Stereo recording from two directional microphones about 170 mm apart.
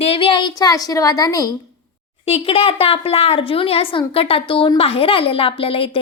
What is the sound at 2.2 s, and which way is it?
Speech, 35° left (ahead or behind).